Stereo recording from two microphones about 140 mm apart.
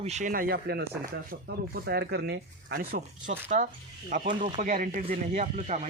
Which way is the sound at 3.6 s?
60° right (ahead or behind).